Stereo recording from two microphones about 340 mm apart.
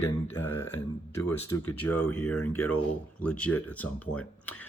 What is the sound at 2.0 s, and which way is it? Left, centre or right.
Speech, centre.